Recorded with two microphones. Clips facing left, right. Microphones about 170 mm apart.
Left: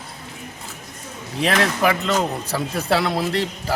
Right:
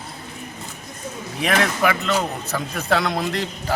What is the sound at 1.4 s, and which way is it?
A man's voice, 35° left (ahead or behind).